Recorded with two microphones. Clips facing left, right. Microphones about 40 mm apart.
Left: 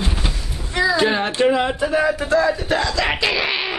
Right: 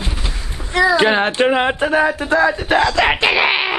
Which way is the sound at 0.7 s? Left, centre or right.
Right.